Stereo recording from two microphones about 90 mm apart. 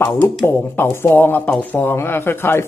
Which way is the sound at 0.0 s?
20° left (ahead or behind).